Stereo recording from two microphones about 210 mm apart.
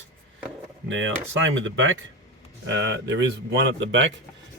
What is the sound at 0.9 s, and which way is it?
Speech, 65° right (ahead or behind).